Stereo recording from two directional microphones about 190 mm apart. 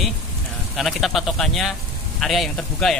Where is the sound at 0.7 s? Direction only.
Centre (ahead or behind).